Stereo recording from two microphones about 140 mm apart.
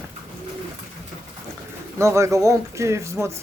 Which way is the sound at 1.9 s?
20° right (ahead or behind).